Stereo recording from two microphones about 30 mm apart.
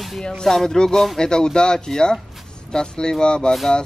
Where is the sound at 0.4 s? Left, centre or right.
Centre.